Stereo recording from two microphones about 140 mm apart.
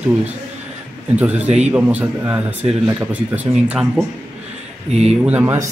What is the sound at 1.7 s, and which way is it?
Speech, 10° right (ahead or behind).